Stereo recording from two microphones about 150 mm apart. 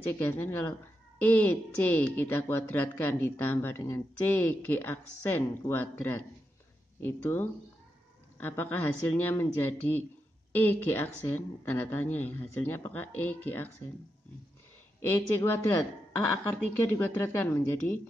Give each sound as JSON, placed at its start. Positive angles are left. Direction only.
{"t": 0.0, "sound": "speech", "side_deg": 15}
{"t": 15.0, "sound": "speech", "side_deg": 15}
{"t": 16.9, "sound": "speech", "side_deg": 15}